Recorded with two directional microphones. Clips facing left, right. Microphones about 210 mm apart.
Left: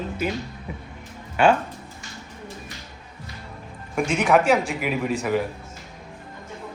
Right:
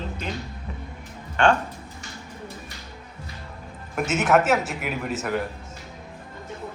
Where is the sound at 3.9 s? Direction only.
5° right (ahead or behind).